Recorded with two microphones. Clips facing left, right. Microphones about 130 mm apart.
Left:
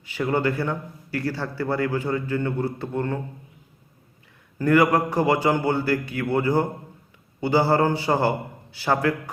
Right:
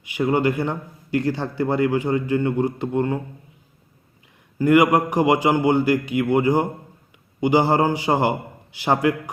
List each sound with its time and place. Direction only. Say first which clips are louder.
0.0 s a man's voice: right 3 dB; 15° right (ahead or behind)
4.5 s a man's voice: right 3 dB; 15° right (ahead or behind)